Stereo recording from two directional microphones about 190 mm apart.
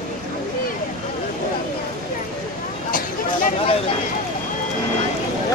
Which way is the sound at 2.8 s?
45° left (ahead or behind).